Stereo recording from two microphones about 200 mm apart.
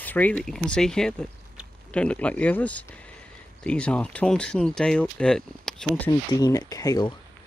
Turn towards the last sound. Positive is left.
turn(degrees=20)  # may be behind; listen again after turning